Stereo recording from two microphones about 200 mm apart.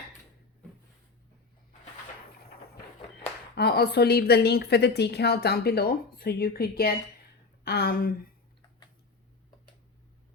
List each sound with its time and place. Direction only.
3.5 s a woman's voice: 55° left (ahead or behind)